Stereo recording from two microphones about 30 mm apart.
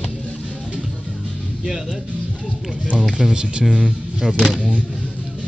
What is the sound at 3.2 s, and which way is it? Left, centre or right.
Speech, right.